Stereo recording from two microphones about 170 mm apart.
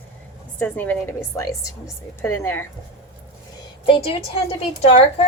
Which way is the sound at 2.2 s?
15° left (ahead or behind).